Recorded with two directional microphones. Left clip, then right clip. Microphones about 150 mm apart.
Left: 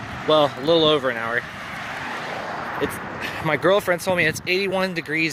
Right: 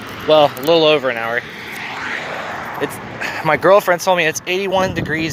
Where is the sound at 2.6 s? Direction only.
35° right (ahead or behind).